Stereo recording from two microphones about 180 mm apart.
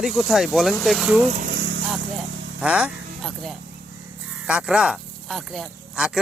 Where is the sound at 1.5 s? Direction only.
70° right (ahead or behind).